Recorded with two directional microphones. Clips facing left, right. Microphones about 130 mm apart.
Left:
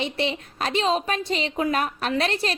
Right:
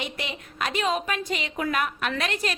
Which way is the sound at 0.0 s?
30° left (ahead or behind).